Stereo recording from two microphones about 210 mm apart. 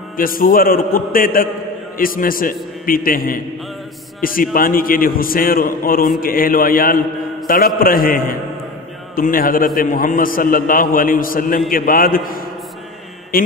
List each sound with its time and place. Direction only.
0.2 s a man's voice: 40° left (ahead or behind)
13.3 s mantra: 45° left (ahead or behind)